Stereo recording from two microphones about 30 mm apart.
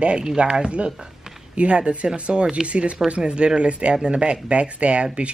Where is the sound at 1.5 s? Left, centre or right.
Right.